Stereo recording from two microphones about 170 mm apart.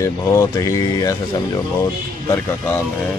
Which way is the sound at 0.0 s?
20° left (ahead or behind).